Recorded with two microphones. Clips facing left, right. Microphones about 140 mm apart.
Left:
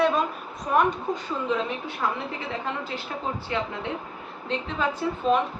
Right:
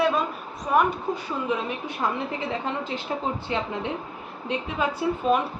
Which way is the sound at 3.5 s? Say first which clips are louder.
Even; 20° right (ahead or behind).